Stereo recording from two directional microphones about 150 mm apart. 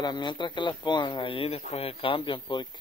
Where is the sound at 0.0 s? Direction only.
30° left (ahead or behind).